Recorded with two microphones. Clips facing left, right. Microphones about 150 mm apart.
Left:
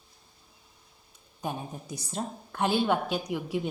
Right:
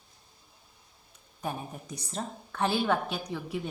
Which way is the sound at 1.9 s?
10° left (ahead or behind).